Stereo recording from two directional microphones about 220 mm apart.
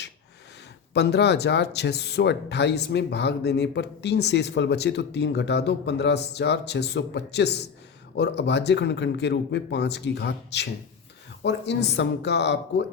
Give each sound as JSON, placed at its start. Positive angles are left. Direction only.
{"t": 0.9, "sound": "speech", "side_deg": 50}